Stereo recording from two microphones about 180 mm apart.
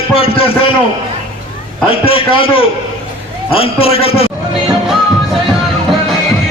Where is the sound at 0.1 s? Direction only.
30° left (ahead or behind).